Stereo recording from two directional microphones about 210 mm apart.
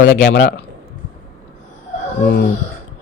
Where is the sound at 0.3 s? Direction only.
45° left (ahead or behind).